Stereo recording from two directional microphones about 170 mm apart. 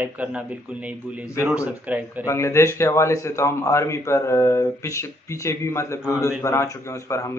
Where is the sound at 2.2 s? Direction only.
15° left (ahead or behind).